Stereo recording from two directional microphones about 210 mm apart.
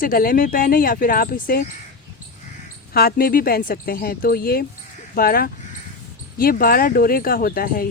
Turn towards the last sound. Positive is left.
turn(degrees=45)  # may be behind; listen again after turning